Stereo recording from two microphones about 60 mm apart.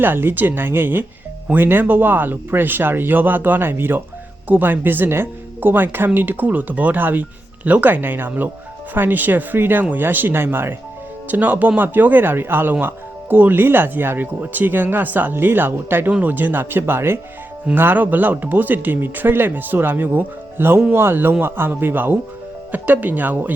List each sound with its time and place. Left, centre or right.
0.0 s speech: right
11.3 s speech: right